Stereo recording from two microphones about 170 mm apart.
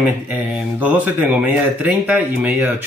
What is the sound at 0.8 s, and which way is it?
Speech, 10° right (ahead or behind).